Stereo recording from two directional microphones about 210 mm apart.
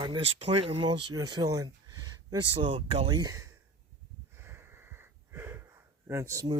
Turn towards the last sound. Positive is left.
turn(degrees=-15)  # may be behind; listen again after turning